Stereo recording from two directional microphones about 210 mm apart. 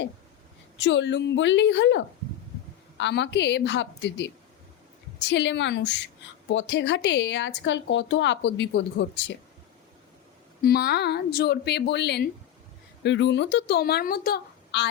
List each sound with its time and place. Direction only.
0.8 s speech: 60° left (ahead or behind)
5.3 s speech: 55° left (ahead or behind)
10.6 s speech: 45° left (ahead or behind)